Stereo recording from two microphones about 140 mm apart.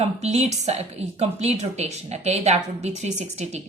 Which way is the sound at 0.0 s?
50° right (ahead or behind).